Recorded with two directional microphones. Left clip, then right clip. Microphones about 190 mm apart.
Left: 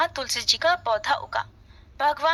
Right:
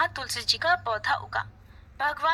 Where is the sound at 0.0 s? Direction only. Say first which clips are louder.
Left 3 dB; 35° left (ahead or behind).